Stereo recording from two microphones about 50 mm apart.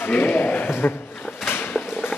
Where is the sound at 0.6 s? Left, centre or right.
Left.